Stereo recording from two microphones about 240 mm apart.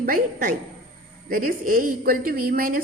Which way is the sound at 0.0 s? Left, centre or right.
Right.